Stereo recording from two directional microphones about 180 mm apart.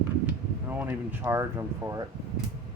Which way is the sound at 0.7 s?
10° right (ahead or behind).